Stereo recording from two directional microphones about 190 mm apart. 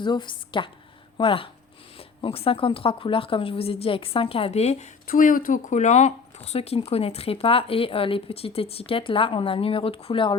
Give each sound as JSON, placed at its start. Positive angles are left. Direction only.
{"t": 0.0, "sound": "speech", "side_deg": 25}
{"t": 5.0, "sound": "speech", "side_deg": 45}